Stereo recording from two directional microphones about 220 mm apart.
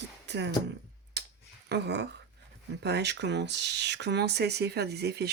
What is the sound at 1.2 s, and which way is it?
Clicking, 50° right (ahead or behind).